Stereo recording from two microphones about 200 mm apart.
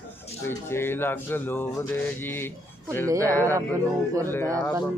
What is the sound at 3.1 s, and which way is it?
Speech, 15° right (ahead or behind).